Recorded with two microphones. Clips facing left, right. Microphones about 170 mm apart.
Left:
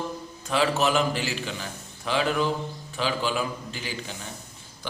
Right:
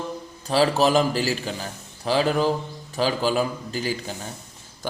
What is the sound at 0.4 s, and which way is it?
A man's voice, 35° right (ahead or behind).